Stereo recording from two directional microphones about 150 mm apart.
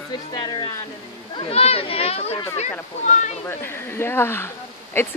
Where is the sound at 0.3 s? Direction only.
30° left (ahead or behind).